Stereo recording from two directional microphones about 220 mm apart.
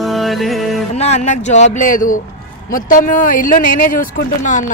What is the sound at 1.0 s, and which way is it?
Speech, 30° left (ahead or behind).